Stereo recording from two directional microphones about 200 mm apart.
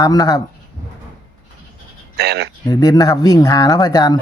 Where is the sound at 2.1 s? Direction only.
55° right (ahead or behind).